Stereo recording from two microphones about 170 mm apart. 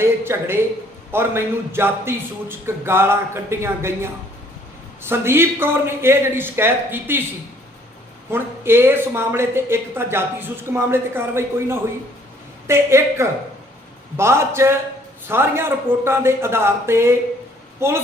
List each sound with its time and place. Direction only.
0.0 s speech: 15° right (ahead or behind)
8.3 s a woman's voice: 15° right (ahead or behind)